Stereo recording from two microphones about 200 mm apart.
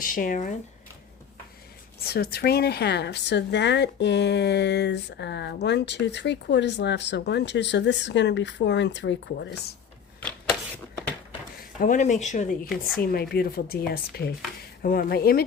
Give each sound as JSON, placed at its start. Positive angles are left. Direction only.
{"t": 0.0, "sound": "speech", "side_deg": 45}
{"t": 2.0, "sound": "speech", "side_deg": 50}
{"t": 10.2, "sound": "a sound", "side_deg": 5}
{"t": 11.8, "sound": "speech", "side_deg": 40}
{"t": 13.0, "sound": "speech", "side_deg": 50}